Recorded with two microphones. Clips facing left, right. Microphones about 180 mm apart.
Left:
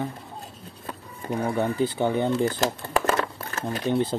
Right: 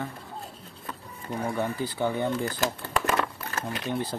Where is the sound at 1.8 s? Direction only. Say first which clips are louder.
Left 4 dB; 20° left (ahead or behind).